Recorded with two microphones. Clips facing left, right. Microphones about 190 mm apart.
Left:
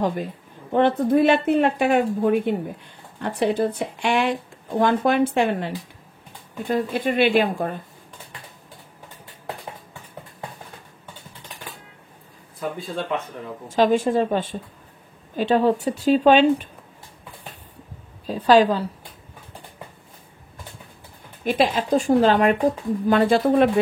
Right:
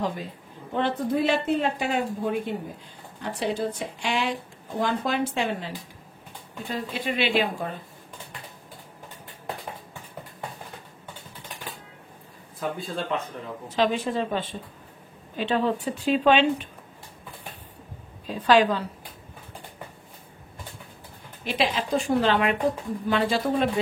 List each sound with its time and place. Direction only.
0.0 s speech: 50° left (ahead or behind)
6.7 s speech: 50° left (ahead or behind)
13.7 s speech: 45° left (ahead or behind)
18.2 s speech: 35° left (ahead or behind)
21.5 s speech: 50° left (ahead or behind)